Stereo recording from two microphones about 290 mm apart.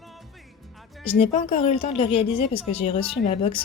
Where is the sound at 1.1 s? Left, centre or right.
Left.